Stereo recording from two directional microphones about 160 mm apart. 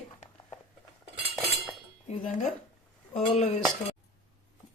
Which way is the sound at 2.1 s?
50° left (ahead or behind).